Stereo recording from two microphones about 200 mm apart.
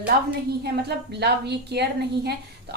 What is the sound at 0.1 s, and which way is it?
A woman's voice, 50° right (ahead or behind).